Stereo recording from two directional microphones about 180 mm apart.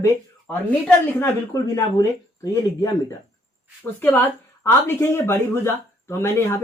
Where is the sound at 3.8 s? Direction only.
10° left (ahead or behind).